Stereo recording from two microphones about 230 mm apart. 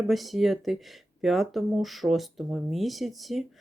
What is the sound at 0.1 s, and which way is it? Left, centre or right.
Speech, centre.